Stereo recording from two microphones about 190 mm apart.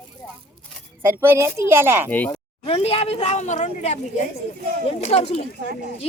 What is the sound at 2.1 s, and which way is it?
Speech, 10° left (ahead or behind).